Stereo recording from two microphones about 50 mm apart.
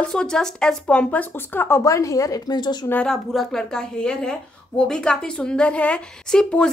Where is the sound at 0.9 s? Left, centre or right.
Left.